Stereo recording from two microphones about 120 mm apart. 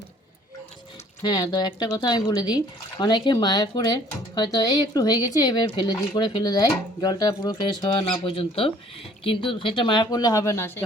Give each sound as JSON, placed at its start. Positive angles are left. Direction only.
{"t": 1.2, "sound": "speech", "side_deg": 35}